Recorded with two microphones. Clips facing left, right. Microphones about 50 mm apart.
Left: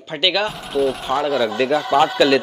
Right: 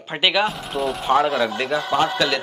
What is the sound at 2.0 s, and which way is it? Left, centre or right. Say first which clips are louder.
Speech: left 6 dB; centre.